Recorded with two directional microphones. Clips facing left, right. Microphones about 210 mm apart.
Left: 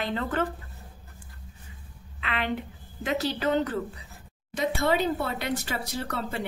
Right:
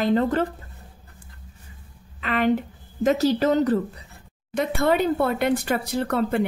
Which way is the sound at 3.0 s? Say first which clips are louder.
Right 8 dB; 40° right (ahead or behind).